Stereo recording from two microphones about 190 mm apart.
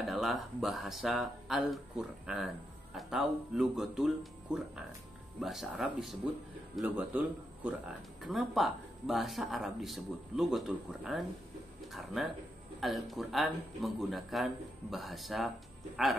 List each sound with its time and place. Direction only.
0.0 s speech: centre (ahead or behind)